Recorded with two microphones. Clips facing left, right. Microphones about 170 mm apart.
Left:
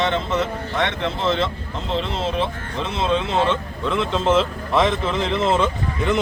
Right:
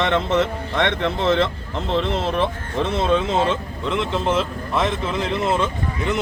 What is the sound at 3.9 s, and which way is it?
A man's voice, 15° right (ahead or behind).